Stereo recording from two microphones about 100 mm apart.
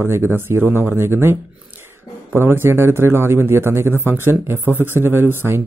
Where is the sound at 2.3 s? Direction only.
25° right (ahead or behind).